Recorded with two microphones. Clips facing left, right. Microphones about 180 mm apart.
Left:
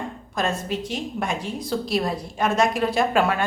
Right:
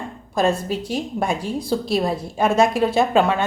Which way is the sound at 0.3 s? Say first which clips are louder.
Right 6 dB; 35° right (ahead or behind).